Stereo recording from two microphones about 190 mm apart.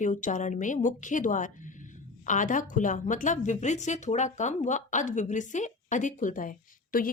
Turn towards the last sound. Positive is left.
turn(degrees=50)  # may be behind; listen again after turning